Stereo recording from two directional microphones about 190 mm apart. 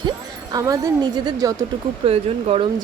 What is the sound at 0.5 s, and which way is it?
Speech, 20° right (ahead or behind).